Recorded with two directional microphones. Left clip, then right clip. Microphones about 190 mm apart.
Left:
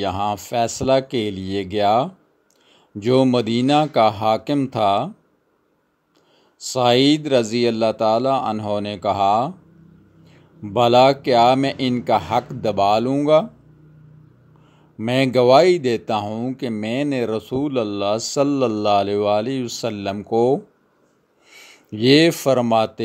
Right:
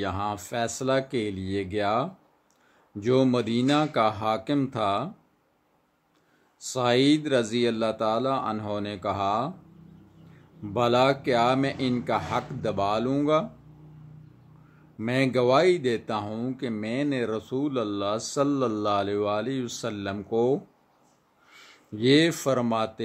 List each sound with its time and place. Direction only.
0.0 s speech: 30° left (ahead or behind)
6.6 s speech: 30° left (ahead or behind)
10.6 s speech: 30° left (ahead or behind)
15.0 s speech: 30° left (ahead or behind)